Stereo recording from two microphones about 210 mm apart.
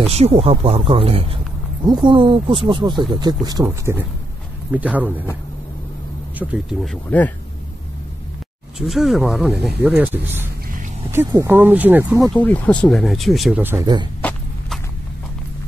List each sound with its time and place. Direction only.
0.1 s speech: 30° right (ahead or behind); by 5.2 s 10° right (ahead or behind)
6.3 s speech: 5° right (ahead or behind)
8.7 s speech: centre (ahead or behind)
12.4 s speech: 5° left (ahead or behind); by 14.0 s 15° right (ahead or behind)
14.2 s walk: 5° left (ahead or behind)